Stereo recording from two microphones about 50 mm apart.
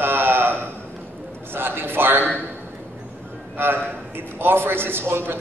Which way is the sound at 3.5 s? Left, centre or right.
Right.